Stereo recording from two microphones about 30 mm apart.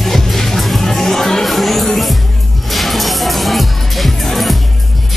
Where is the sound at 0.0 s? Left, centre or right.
Centre.